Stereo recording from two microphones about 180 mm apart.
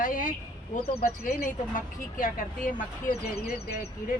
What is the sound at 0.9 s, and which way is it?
Speech, 55° left (ahead or behind).